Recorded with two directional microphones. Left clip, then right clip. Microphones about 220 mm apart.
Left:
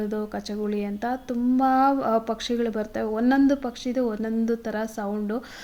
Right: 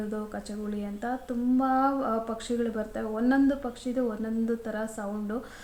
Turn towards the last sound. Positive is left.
turn(degrees=40)  # may be behind; listen again after turning